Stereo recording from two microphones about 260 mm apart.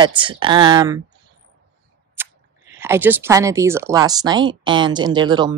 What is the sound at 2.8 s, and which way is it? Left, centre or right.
Speech, centre.